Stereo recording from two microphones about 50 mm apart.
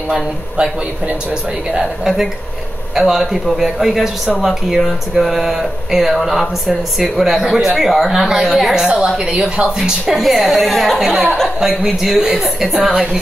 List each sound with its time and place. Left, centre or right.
3.0 s a woman's voice: centre